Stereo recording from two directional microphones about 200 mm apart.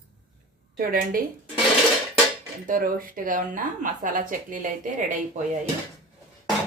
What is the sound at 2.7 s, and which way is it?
Speech, 45° right (ahead or behind).